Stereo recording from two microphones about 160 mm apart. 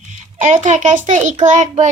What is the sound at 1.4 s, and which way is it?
Child singing, 50° right (ahead or behind).